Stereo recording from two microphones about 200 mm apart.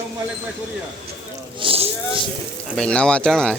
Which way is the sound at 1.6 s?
30° right (ahead or behind).